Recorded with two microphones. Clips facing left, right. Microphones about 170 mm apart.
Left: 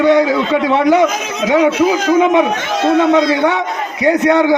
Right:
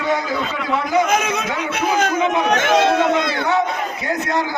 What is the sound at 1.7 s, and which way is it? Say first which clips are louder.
Speech: left 6 dB; 55° right (ahead or behind).